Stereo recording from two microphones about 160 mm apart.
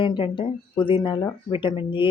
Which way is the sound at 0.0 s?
35° left (ahead or behind).